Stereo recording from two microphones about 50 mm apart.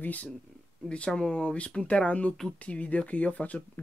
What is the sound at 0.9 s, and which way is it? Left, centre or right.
Speech, centre.